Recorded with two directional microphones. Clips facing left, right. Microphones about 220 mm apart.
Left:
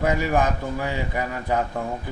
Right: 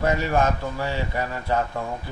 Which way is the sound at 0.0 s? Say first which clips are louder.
Even; 15° left (ahead or behind).